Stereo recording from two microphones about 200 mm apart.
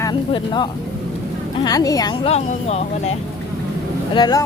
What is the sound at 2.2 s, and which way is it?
Speech, 30° left (ahead or behind).